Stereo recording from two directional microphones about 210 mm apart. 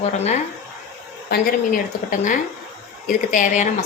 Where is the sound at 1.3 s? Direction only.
40° left (ahead or behind).